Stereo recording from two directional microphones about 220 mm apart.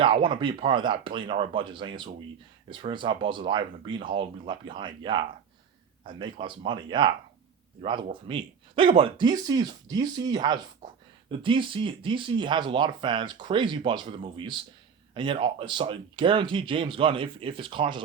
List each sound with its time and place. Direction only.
0.0 s speech: 25° right (ahead or behind)